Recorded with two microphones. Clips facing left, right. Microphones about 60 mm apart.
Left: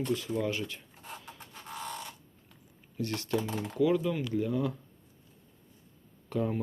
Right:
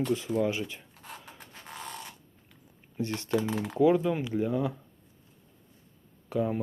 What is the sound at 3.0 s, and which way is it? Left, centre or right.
Speech, right.